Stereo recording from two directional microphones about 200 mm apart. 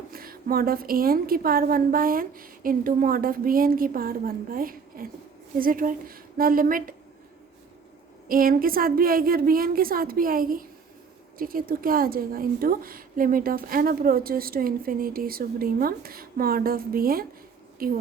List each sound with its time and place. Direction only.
0.1 s a woman's voice: 45° right (ahead or behind)
8.3 s a woman's voice: 45° right (ahead or behind)